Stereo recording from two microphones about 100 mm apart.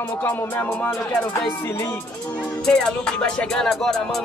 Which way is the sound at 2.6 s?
5° left (ahead or behind).